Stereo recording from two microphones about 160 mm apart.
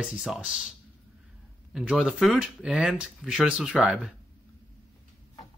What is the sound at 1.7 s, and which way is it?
Speech, 5° right (ahead or behind).